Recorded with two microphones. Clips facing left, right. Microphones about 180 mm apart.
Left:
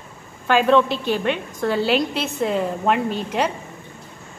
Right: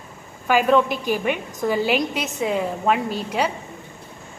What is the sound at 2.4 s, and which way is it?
Speech, centre (ahead or behind).